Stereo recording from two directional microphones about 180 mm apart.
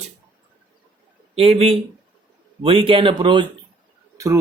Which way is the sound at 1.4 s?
35° right (ahead or behind).